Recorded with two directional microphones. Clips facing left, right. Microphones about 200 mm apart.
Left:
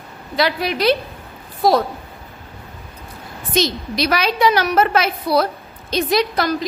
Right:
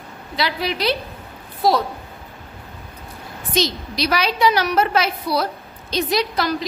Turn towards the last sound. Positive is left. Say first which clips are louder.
# left 3 dB
turn(degrees=50)  # may be behind; listen again after turning